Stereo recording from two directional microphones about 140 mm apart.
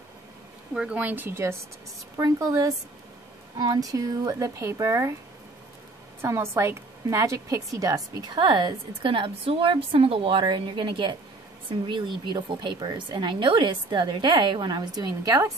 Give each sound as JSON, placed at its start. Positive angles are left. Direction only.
{"t": 0.7, "sound": "speech", "side_deg": -10}
{"t": 6.2, "sound": "a woman's voice", "side_deg": -20}